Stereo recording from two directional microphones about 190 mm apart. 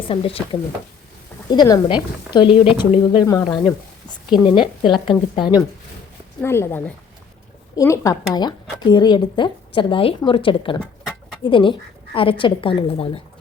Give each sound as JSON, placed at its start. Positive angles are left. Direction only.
{"t": 0.1, "sound": "speech", "side_deg": 30}
{"t": 1.5, "sound": "speech", "side_deg": 20}
{"t": 6.4, "sound": "speech", "side_deg": 15}